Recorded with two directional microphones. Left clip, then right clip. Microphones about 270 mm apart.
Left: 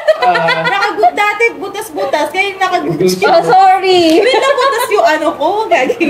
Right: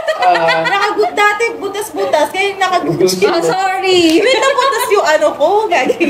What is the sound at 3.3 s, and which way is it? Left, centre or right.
Speech, centre.